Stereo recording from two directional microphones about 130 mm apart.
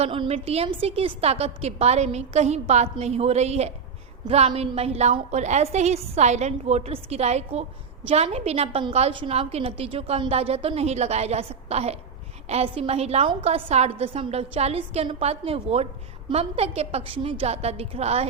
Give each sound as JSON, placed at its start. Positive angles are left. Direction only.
{"t": 0.0, "sound": "a woman's voice", "side_deg": -50}